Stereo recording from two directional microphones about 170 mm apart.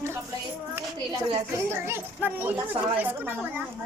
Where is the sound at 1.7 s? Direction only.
15° right (ahead or behind).